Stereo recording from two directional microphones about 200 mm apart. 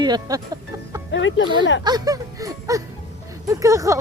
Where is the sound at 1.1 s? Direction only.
65° left (ahead or behind).